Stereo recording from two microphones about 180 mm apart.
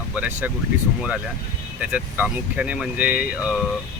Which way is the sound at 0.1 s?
10° right (ahead or behind).